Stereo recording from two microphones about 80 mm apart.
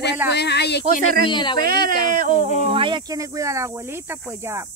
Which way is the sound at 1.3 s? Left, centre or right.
Left.